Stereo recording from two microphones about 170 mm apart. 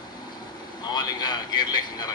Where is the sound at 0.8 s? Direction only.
25° left (ahead or behind).